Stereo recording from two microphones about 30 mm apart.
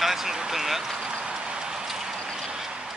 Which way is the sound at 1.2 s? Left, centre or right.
Right.